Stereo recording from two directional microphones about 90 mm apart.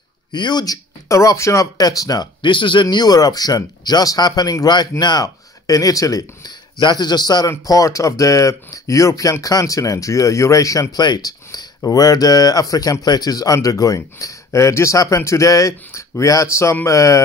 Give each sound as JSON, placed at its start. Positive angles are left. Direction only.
{"t": 0.3, "sound": "speech", "side_deg": 55}
{"t": 2.4, "sound": "speech", "side_deg": 65}
{"t": 6.8, "sound": "speech", "side_deg": 55}